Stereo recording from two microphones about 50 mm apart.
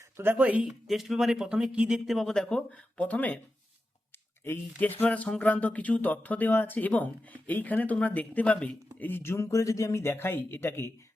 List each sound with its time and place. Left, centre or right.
0.2 s speech: right
0.6 s speech: centre
2.0 s speech: centre
2.5 s a sound: centre
3.0 s speech: left
4.8 s speech: left
5.0 s a sound: left
5.4 s speech: left
9.2 s speech: left